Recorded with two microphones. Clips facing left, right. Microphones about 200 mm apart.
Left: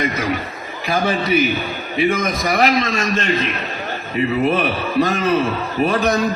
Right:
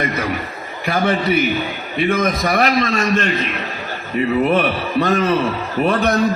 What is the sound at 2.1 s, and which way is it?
A man's voice, 55° right (ahead or behind).